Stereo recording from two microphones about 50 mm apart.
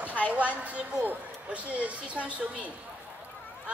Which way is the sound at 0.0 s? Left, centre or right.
Right.